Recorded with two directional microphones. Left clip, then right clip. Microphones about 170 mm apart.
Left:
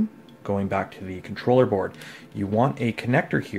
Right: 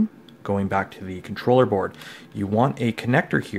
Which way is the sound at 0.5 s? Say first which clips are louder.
Right 2 dB; 20° right (ahead or behind).